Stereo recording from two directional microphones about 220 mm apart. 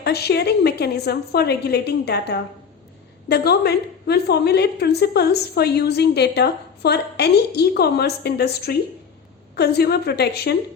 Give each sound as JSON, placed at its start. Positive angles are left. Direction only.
{"t": 0.0, "sound": "a woman's voice", "side_deg": 45}